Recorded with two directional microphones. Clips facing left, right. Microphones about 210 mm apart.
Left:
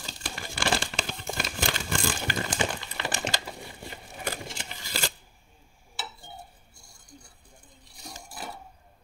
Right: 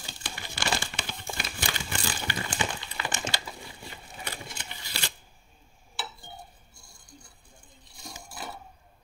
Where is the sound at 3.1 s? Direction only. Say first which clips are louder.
Left 3 dB; 40° left (ahead or behind).